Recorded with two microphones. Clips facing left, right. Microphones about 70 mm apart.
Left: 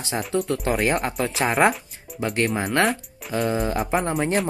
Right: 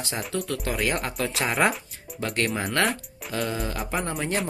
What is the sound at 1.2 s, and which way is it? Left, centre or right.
Speech, left.